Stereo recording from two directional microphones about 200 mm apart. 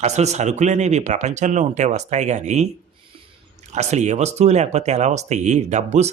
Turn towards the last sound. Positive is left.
turn(degrees=-35)  # may be behind; listen again after turning